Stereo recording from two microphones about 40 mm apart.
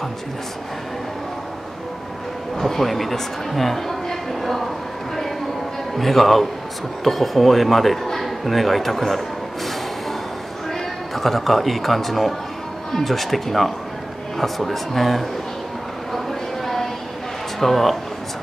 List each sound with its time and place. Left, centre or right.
2.5 s speech: centre
5.9 s speech: centre
10.7 s speech: centre
16.1 s a sound: centre
17.6 s speech: centre